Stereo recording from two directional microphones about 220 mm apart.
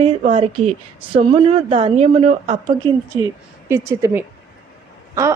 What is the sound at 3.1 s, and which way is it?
Speech, 15° right (ahead or behind).